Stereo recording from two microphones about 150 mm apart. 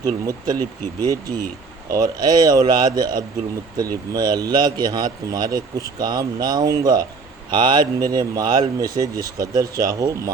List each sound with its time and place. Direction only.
0.0 s a man's voice: 25° right (ahead or behind)